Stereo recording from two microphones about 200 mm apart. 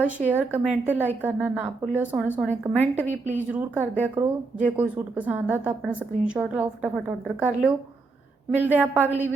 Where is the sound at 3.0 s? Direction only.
35° right (ahead or behind).